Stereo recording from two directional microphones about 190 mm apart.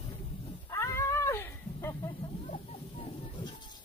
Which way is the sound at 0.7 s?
15° left (ahead or behind).